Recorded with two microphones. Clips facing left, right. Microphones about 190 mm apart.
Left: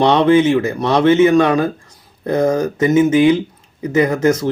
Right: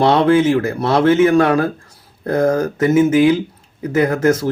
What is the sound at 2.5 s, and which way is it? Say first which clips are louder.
A man's voice: even; centre (ahead or behind).